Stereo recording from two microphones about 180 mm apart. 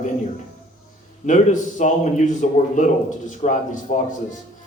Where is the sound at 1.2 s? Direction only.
45° left (ahead or behind).